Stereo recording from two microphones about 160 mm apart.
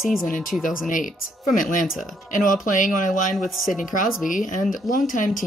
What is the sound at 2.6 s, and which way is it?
Speech, 55° left (ahead or behind).